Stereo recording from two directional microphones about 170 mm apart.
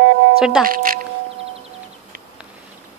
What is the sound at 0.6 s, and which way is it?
Speech, 55° right (ahead or behind).